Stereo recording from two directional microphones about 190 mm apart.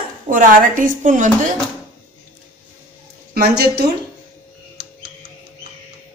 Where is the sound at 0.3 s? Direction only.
45° right (ahead or behind).